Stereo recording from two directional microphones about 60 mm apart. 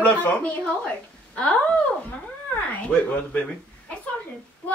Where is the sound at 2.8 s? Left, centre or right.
Left.